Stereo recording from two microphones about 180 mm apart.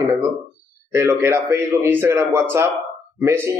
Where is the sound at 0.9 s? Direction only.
15° right (ahead or behind).